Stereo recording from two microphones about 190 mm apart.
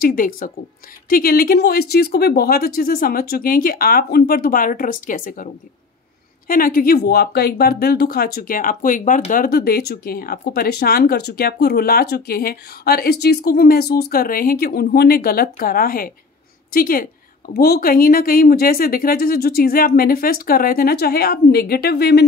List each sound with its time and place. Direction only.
0.0 s speech: 50° left (ahead or behind)